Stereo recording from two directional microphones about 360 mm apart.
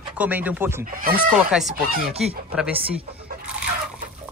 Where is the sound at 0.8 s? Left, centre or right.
Right.